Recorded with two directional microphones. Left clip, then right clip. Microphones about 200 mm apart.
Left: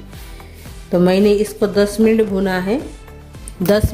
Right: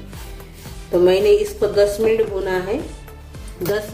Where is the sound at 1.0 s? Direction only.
45° left (ahead or behind).